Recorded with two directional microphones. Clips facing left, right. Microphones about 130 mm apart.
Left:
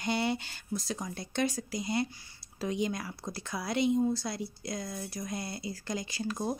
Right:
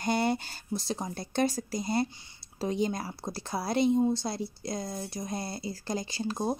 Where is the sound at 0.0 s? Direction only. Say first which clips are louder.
Right 3 dB; 45° right (ahead or behind).